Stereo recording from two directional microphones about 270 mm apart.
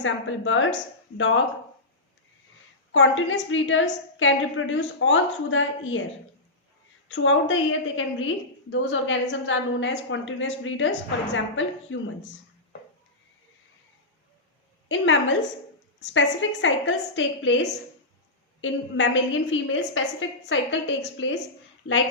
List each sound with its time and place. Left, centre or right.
0.0 s a woman's voice: left
2.9 s a woman's voice: left
7.1 s a woman's voice: left
14.8 s a woman's voice: left